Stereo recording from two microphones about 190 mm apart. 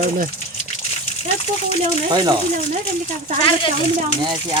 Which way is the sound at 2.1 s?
25° right (ahead or behind).